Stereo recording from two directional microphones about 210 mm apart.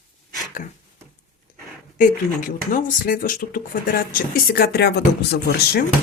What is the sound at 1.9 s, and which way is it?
Speech, 40° left (ahead or behind).